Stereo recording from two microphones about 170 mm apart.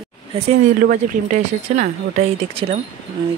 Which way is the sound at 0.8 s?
50° right (ahead or behind).